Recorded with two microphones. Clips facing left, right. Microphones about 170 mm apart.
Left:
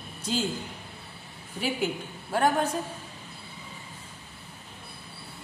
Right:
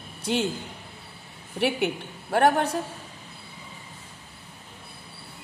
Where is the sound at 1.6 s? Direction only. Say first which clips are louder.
Right 4 dB; 70° right (ahead or behind).